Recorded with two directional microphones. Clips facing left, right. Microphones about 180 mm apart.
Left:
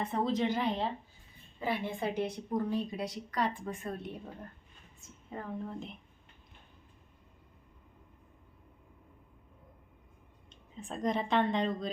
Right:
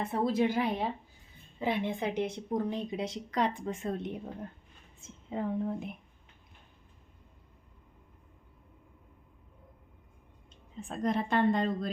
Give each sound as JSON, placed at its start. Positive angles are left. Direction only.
{"t": 0.0, "sound": "a woman's voice", "side_deg": -10}
{"t": 10.8, "sound": "a woman's voice", "side_deg": -5}